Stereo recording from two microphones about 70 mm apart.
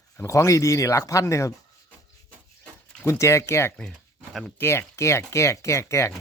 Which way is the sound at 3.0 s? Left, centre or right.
Left.